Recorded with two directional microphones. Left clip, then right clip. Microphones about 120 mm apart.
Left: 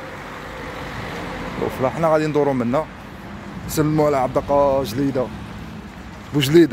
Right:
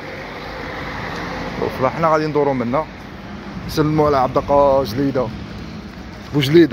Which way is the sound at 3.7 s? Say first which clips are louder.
Right 2 dB; 40° left (ahead or behind).